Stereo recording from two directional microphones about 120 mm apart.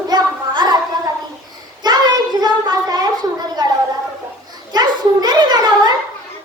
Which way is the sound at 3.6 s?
35° right (ahead or behind).